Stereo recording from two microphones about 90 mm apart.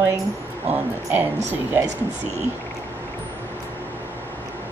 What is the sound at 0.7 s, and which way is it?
A woman's voice, 20° right (ahead or behind).